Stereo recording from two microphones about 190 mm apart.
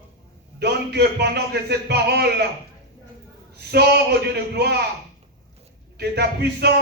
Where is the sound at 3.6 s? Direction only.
60° right (ahead or behind).